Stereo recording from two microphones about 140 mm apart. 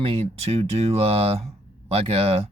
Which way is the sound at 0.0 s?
45° right (ahead or behind).